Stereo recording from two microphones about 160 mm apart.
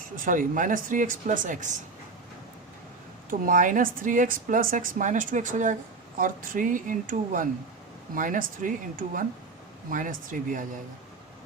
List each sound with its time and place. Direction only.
0.2 s a woman's voice: 55° right (ahead or behind)
3.2 s a woman's voice: 60° right (ahead or behind)